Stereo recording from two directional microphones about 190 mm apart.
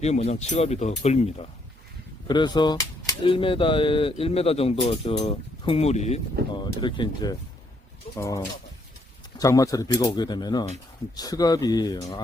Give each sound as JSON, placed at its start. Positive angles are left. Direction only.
{"t": 0.0, "sound": "speech", "side_deg": 35}
{"t": 2.2, "sound": "speech", "side_deg": 25}
{"t": 6.6, "sound": "speech", "side_deg": 25}